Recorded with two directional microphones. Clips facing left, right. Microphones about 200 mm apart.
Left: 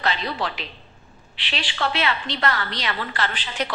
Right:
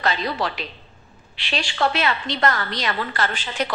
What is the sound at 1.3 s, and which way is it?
A woman's voice, 45° right (ahead or behind).